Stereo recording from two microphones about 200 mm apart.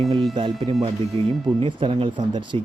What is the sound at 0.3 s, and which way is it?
Speech, 25° right (ahead or behind).